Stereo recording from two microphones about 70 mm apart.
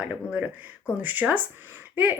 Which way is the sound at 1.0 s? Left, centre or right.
Right.